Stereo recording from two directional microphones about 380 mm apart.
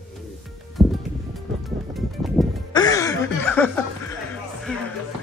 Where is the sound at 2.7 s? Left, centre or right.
Centre.